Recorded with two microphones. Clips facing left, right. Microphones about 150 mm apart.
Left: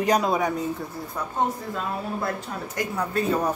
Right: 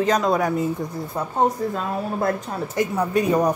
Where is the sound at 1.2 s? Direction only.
25° right (ahead or behind).